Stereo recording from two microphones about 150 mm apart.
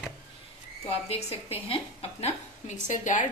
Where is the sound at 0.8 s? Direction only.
40° left (ahead or behind).